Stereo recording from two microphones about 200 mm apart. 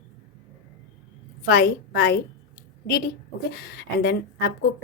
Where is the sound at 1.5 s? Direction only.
55° left (ahead or behind).